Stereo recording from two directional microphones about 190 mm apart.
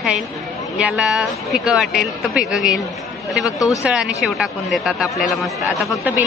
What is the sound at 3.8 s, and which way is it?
Speech, 5° right (ahead or behind).